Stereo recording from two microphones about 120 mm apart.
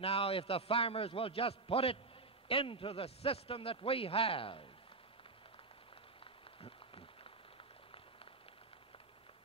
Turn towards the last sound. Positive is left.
turn(degrees=50)  # may be behind; listen again after turning